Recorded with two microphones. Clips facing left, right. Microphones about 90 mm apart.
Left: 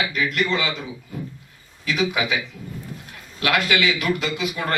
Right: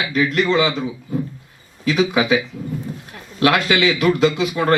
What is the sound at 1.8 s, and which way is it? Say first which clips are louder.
Speech: right 6 dB; 35° right (ahead or behind).